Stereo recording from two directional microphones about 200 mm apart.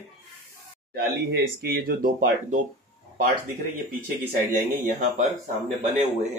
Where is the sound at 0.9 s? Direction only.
55° right (ahead or behind).